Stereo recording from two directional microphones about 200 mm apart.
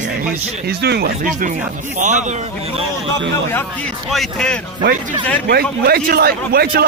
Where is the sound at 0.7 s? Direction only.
55° right (ahead or behind); by 2.7 s 35° right (ahead or behind).